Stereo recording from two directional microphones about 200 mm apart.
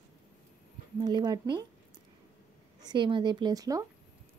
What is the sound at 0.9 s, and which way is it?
Speech, 20° right (ahead or behind).